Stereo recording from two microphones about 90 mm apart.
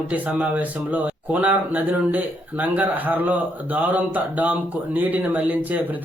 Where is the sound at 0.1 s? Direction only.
15° right (ahead or behind).